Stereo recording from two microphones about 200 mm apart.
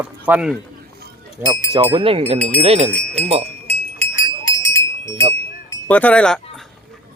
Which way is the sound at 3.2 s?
30° right (ahead or behind).